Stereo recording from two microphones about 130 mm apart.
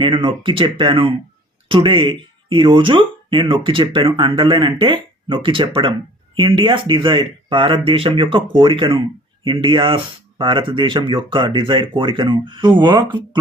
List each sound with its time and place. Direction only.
0.0 s speech: 40° right (ahead or behind)